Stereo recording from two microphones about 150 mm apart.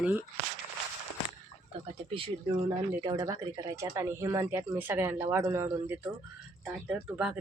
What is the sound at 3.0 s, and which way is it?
Speech, 25° right (ahead or behind).